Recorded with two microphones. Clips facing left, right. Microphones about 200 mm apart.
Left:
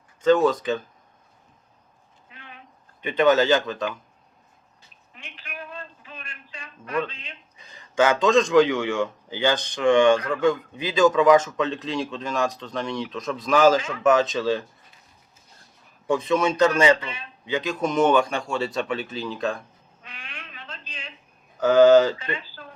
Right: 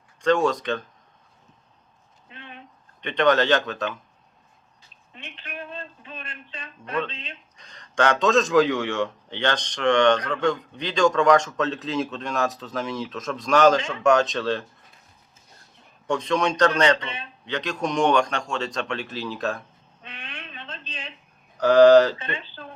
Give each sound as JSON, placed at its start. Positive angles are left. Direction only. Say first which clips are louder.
{"t": 0.2, "sound": "a man's voice", "louder": "left 3 dB", "side_deg": 5}
{"t": 2.3, "sound": "a sound", "louder": "right 4 dB", "side_deg": -25}
{"t": 3.0, "sound": "a man's voice", "louder": "left 2 dB", "side_deg": 5}
{"t": 5.1, "sound": "a sound", "louder": "right 2 dB", "side_deg": -25}
{"t": 7.1, "sound": "speech", "louder": "right 3 dB", "side_deg": -25}
{"t": 7.5, "sound": "a man's voice", "louder": "left 2 dB", "side_deg": 5}
{"t": 16.0, "sound": "a man's voice", "louder": "left 2 dB", "side_deg": 5}
{"t": 17.0, "sound": "speech", "louder": "right 1 dB", "side_deg": -25}
{"t": 17.4, "sound": "a man's voice", "louder": "left 2 dB", "side_deg": 5}
{"t": 20.0, "sound": "a sound", "louder": "right 3 dB", "side_deg": -25}
{"t": 21.6, "sound": "a man's voice", "louder": "right 1 dB", "side_deg": 0}
{"t": 22.2, "sound": "speech", "louder": "left 1 dB", "side_deg": -25}